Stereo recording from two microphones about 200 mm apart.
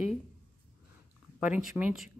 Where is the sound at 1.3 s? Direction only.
5° right (ahead or behind).